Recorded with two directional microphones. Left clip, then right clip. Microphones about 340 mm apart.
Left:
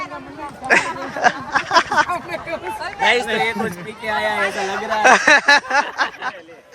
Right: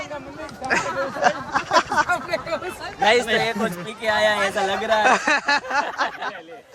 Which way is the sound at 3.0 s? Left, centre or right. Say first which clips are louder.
Left 1 dB; right.